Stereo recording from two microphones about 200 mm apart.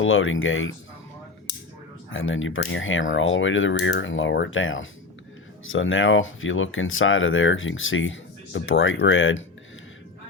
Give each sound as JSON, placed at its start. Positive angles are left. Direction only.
{"t": 0.0, "sound": "speech", "side_deg": 80}
{"t": 2.0, "sound": "speech", "side_deg": 80}